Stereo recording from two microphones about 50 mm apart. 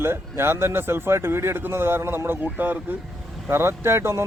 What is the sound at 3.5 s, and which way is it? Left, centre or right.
Speech, right.